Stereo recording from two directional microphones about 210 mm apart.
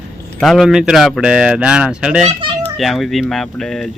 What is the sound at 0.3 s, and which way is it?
Speech, centre (ahead or behind).